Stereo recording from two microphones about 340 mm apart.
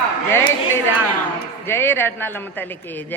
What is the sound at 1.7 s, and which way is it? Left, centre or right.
A woman's voice, centre.